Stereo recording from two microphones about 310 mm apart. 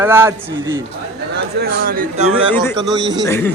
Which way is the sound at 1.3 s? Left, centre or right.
Right.